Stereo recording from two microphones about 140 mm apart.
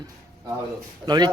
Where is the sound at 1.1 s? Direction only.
30° right (ahead or behind).